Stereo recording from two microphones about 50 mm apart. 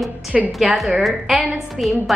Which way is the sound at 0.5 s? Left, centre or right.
Centre.